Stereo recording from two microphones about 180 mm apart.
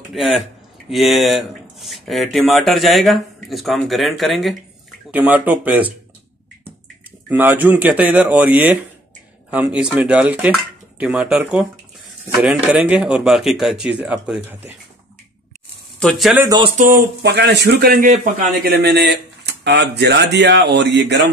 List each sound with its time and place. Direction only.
0.1 s speech: centre (ahead or behind)
7.2 s speech: 10° right (ahead or behind)
16.0 s speech: centre (ahead or behind)
16.5 s speech: 35° right (ahead or behind)
16.9 s speech: 65° right (ahead or behind); by 18.7 s 45° right (ahead or behind)
18.8 s speech: 65° right (ahead or behind)